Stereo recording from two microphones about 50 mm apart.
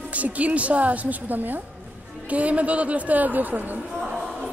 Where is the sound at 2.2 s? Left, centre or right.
Right.